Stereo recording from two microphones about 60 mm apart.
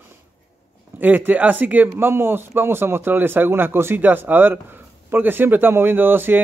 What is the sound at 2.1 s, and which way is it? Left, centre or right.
Speech, right.